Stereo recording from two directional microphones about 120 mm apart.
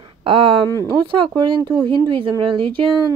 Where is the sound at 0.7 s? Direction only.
30° right (ahead or behind).